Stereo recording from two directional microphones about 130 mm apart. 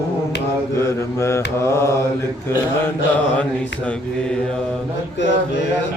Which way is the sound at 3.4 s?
10° left (ahead or behind).